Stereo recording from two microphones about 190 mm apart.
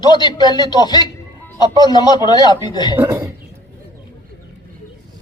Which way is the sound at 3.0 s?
15° right (ahead or behind).